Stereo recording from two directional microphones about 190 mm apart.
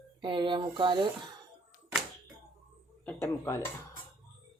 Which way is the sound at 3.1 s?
15° left (ahead or behind).